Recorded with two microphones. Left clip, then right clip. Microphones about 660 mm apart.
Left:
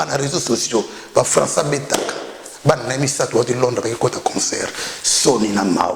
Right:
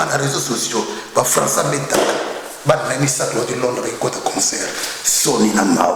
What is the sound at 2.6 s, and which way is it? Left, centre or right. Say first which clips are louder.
Speech: right 1 dB; left.